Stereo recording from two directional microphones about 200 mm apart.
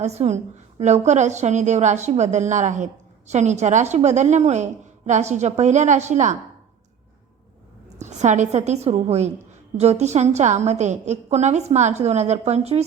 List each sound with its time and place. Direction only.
0.0 s a woman's voice: 35° right (ahead or behind)
7.9 s a woman's voice: 35° right (ahead or behind)